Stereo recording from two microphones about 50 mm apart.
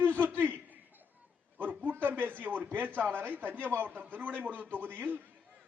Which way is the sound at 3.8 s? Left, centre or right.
Right.